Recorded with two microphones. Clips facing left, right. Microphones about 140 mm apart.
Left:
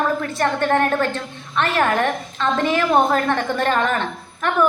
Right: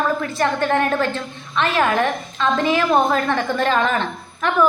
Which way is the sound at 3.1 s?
50° left (ahead or behind).